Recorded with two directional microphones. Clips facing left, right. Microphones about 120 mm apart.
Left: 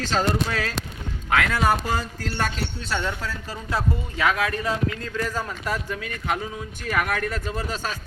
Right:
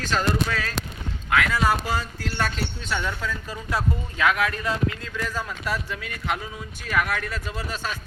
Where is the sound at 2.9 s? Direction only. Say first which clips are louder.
Left 1 dB; 30° left (ahead or behind).